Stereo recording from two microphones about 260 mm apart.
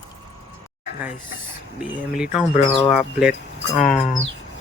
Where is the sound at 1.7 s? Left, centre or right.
Centre.